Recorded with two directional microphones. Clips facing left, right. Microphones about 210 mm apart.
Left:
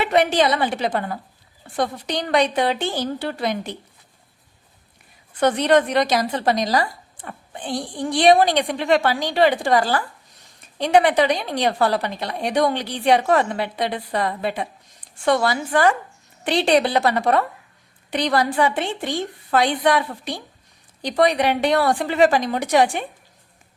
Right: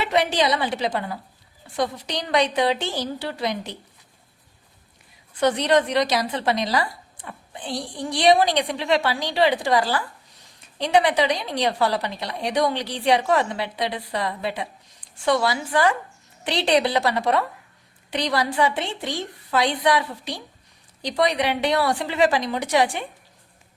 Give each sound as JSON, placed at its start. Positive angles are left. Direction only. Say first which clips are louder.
{"t": 0.0, "sound": "a woman's voice", "louder": "left 3 dB", "side_deg": 50}
{"t": 5.4, "sound": "a woman's voice", "louder": "left 2 dB", "side_deg": 50}